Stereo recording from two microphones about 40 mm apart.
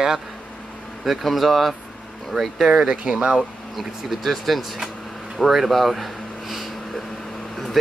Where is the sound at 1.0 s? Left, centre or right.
Centre.